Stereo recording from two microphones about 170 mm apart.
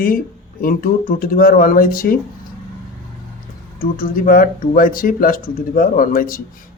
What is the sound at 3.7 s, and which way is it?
Speech, 55° left (ahead or behind).